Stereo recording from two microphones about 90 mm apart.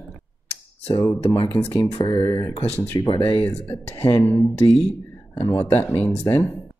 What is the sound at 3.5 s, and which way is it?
Speech, 30° left (ahead or behind).